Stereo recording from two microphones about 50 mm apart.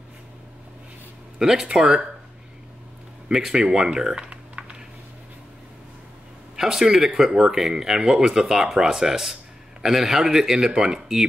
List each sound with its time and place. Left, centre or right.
1.4 s speech: centre
3.3 s speech: centre
4.3 s typing: centre
6.5 s speech: centre